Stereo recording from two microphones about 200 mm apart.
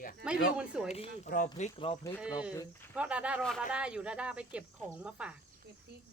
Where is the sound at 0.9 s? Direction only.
35° left (ahead or behind).